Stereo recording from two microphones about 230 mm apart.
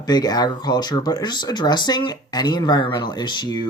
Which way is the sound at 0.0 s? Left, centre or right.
Centre.